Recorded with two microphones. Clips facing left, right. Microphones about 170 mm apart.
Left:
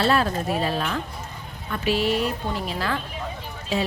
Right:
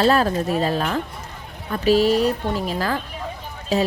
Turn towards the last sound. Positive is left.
turn(degrees=-40)  # may be behind; listen again after turning